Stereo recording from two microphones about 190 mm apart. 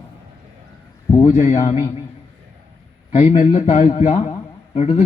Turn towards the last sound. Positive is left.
turn(degrees=35)  # may be behind; listen again after turning